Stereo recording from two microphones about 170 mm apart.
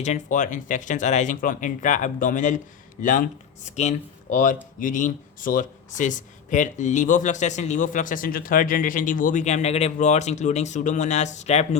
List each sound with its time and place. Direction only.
0.0 s speech: 45° left (ahead or behind)